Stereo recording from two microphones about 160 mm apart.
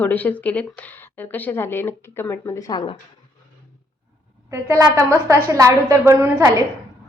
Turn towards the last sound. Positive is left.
turn(degrees=-15)  # may be behind; listen again after turning